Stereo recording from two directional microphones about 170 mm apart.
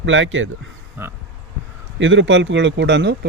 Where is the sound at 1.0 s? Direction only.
15° right (ahead or behind).